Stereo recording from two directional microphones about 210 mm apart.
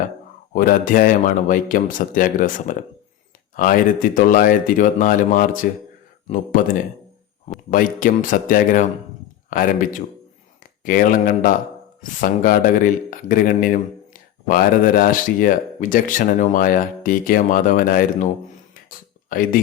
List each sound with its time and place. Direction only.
0.5 s speech: 40° left (ahead or behind)
7.7 s speech: 40° left (ahead or behind)
19.3 s speech: 40° left (ahead or behind)